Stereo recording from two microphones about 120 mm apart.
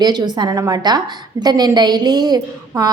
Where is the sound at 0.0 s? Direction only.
35° right (ahead or behind).